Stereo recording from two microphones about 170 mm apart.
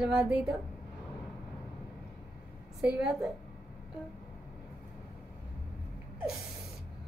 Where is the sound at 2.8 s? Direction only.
5° right (ahead or behind).